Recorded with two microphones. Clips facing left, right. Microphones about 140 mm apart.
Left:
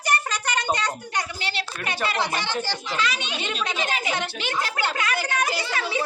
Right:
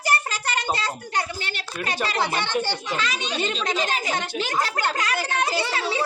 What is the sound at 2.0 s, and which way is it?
A child's voice, 35° right (ahead or behind).